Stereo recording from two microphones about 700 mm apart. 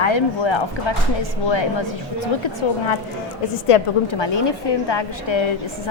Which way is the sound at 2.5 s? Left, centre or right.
Left.